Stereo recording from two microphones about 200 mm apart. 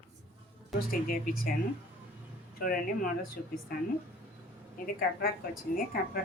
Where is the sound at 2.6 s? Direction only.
45° left (ahead or behind).